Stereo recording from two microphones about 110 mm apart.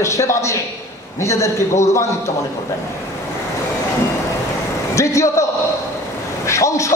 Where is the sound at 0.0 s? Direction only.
25° left (ahead or behind).